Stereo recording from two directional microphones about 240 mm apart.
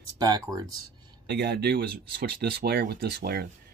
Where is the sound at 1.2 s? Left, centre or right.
Right.